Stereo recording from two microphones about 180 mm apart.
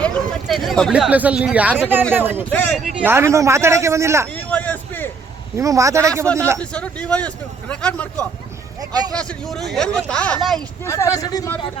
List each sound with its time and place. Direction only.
0.0 s a man's voice: 5° left (ahead or behind); by 4.3 s 15° right (ahead or behind)
4.5 s a sound: 10° left (ahead or behind)
5.5 s a man's voice: 15° right (ahead or behind)
6.6 s a man's voice: 5° left (ahead or behind)
8.9 s a man's voice: 20° right (ahead or behind)
9.1 s speech: centre (ahead or behind)
10.8 s a man's voice: 15° left (ahead or behind)